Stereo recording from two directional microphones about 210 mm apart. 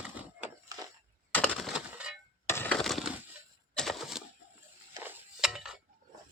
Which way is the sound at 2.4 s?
10° left (ahead or behind).